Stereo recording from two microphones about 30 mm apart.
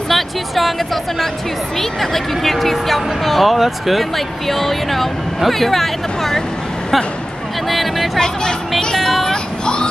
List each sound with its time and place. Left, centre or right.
0.1 s music: centre
1.8 s speech: centre
7.7 s speech: centre
8.7 s music: centre
9.3 s vehicle: left